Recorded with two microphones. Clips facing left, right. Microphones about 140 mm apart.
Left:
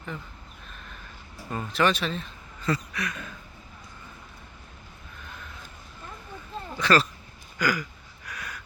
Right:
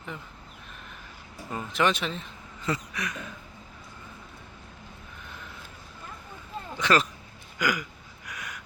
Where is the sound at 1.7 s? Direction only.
20° right (ahead or behind).